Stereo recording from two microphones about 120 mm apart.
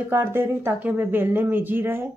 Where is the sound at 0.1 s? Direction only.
20° right (ahead or behind).